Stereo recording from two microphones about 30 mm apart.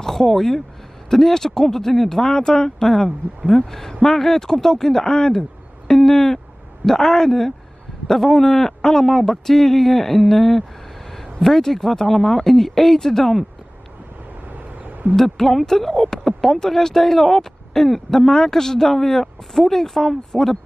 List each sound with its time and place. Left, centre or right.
0.0 s speech: centre
15.1 s speech: centre